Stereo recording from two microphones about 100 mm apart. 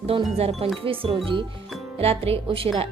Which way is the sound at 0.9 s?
65° right (ahead or behind).